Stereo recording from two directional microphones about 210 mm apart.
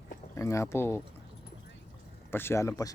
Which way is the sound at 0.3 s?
15° left (ahead or behind).